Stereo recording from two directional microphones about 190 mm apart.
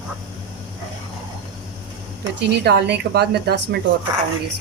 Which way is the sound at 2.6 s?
60° right (ahead or behind).